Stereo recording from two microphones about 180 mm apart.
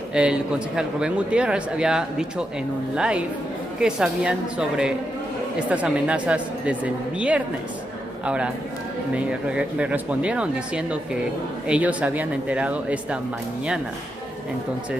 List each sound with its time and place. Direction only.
0.1 s a man's voice: 5° right (ahead or behind)